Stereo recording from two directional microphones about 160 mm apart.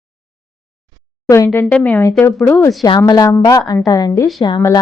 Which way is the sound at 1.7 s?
10° left (ahead or behind).